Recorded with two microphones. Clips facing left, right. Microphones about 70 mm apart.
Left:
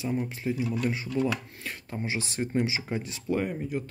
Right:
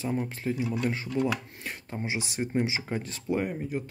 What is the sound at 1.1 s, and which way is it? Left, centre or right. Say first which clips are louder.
Speech: even; right.